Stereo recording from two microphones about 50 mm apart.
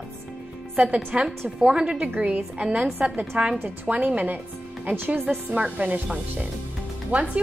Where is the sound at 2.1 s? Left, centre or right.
Right.